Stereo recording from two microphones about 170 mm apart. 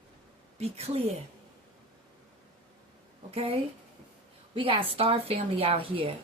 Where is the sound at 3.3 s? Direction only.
35° right (ahead or behind).